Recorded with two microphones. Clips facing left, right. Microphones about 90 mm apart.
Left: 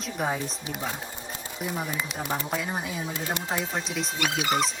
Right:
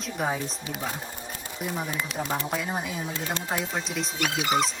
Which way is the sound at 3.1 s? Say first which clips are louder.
Even; 15° left (ahead or behind).